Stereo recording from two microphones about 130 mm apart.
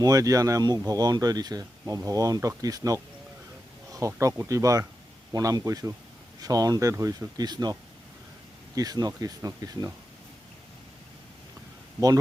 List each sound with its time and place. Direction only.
0.0 s speech: 25° right (ahead or behind)